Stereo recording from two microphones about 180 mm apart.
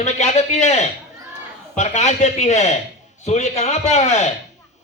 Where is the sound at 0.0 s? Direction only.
40° left (ahead or behind).